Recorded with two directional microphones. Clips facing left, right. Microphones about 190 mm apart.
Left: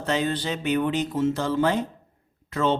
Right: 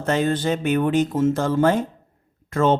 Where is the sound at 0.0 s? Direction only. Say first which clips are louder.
Right 4 dB; 50° right (ahead or behind).